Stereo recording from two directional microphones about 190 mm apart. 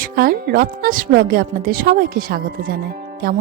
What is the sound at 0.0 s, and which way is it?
Speech, 50° right (ahead or behind).